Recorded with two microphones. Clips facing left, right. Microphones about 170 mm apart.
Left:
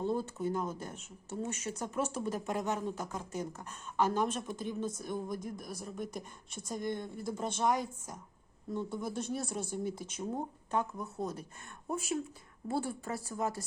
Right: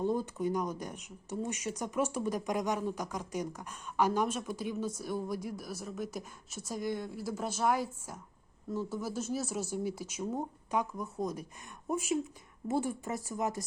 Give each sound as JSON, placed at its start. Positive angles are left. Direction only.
{"t": 0.0, "sound": "a woman's voice", "side_deg": -15}